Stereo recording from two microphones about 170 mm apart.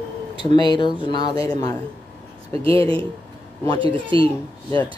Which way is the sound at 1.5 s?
20° left (ahead or behind).